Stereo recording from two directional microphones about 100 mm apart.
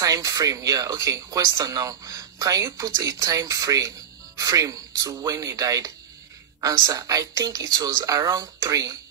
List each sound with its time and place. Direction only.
0.0 s speech: 35° right (ahead or behind)